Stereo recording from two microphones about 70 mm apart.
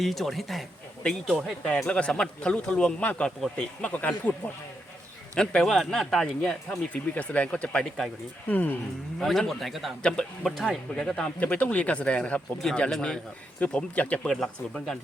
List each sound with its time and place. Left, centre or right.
0.0 s a man's voice: centre; by 4.4 s left
5.3 s speech: centre
6.7 s speech: left
8.4 s speech: left
9.1 s a man's voice: centre
10.0 s speech: centre
14.3 s speech: centre